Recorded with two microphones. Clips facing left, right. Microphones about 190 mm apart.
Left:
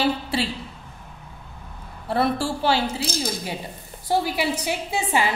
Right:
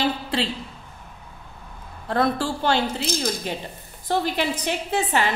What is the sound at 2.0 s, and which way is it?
A woman's voice, 10° left (ahead or behind).